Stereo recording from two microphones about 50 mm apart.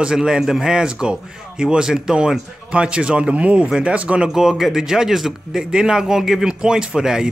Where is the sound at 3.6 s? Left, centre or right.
Centre.